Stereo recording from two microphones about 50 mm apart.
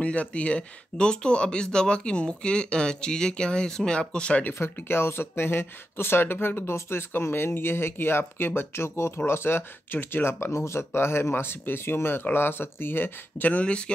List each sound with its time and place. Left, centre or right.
0.0 s speech: left
4.6 s speech: left
13.5 s speech: left